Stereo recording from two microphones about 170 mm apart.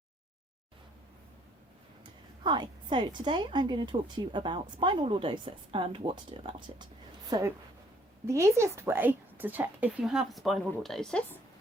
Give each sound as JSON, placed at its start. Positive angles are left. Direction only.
{"t": 2.0, "sound": "a woman's voice", "side_deg": -25}